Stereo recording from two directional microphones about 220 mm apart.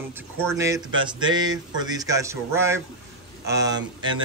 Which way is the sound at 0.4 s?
15° right (ahead or behind).